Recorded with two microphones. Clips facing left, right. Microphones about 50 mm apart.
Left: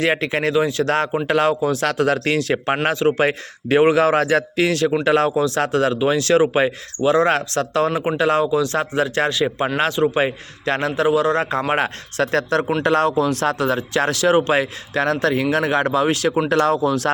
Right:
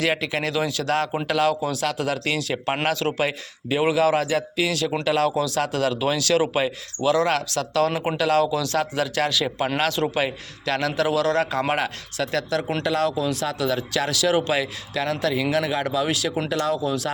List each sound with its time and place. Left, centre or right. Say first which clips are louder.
0.0 s speech: left 4 dB; left
2.8 s speech: left 6 dB; left
3.2 s a man's voice: left 6 dB; left
11.7 s speech: left 4 dB; left